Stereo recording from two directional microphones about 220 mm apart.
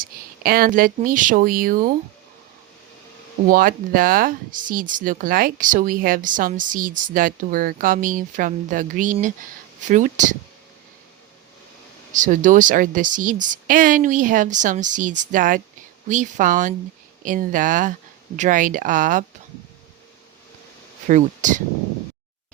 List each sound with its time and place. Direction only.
0.0 s speech: 40° right (ahead or behind)
3.5 s speech: 40° right (ahead or behind)
12.1 s speech: 35° right (ahead or behind)
21.1 s speech: 35° right (ahead or behind)